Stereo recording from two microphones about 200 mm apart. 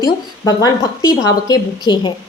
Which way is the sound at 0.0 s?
20° left (ahead or behind).